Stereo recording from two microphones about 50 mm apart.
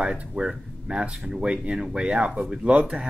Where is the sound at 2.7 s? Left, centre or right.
Right.